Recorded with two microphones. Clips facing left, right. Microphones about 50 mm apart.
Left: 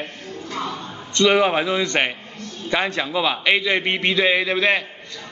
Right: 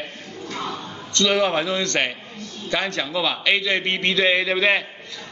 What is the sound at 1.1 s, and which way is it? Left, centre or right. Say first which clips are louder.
A man's voice: left 3 dB; centre.